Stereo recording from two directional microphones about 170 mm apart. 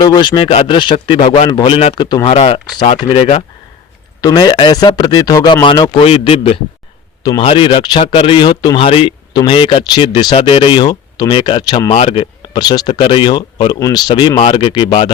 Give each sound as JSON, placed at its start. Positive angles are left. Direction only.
{"t": 0.0, "sound": "speech", "side_deg": 25}
{"t": 4.2, "sound": "speech", "side_deg": 20}